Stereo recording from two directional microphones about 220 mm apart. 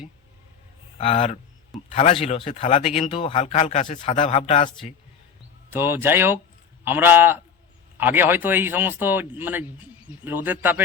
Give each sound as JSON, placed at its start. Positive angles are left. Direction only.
{"t": 0.9, "sound": "speech", "side_deg": 30}
{"t": 5.7, "sound": "a man's voice", "side_deg": -10}